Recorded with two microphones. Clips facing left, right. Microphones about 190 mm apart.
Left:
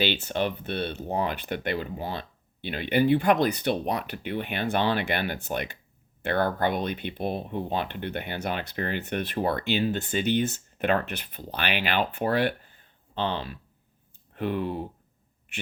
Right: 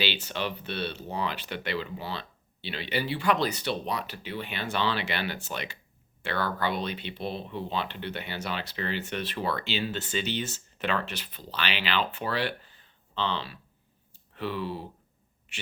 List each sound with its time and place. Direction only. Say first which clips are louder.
0.0 s speech: left 5 dB; 50° left (ahead or behind)